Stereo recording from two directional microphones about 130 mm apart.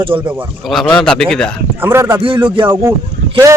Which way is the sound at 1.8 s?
20° right (ahead or behind).